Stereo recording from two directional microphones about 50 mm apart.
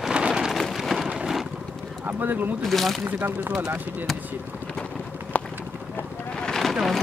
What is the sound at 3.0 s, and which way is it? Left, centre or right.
Speech, right.